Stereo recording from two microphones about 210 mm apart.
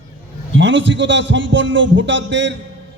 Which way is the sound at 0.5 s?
60° right (ahead or behind).